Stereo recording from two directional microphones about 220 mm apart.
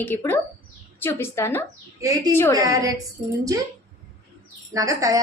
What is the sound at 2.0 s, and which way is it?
Speech, 15° right (ahead or behind).